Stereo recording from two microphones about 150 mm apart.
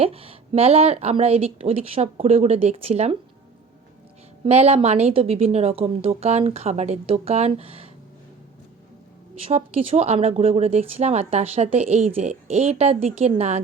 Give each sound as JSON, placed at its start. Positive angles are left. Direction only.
{"t": 0.0, "sound": "speech", "side_deg": -40}
{"t": 4.4, "sound": "speech", "side_deg": -45}
{"t": 9.4, "sound": "speech", "side_deg": -40}